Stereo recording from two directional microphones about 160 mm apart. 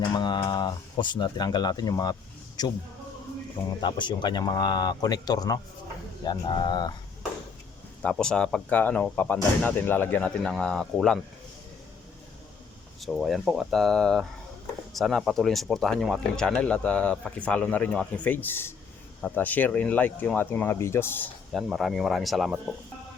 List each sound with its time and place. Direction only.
0.0 s speech: 25° left (ahead or behind)
3.8 s speech: 30° left (ahead or behind)
8.0 s speech: 5° left (ahead or behind)
13.0 s speech: centre (ahead or behind)
21.5 s speech: centre (ahead or behind)